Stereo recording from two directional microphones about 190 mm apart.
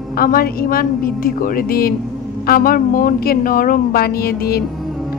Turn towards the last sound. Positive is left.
turn(degrees=55)  # may be behind; listen again after turning